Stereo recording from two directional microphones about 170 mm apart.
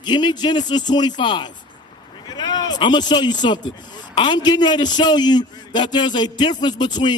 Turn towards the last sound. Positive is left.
turn(degrees=25)  # may be behind; listen again after turning